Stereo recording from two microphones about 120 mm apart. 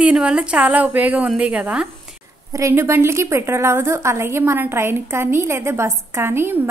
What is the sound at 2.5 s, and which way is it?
A woman's voice, 25° right (ahead or behind).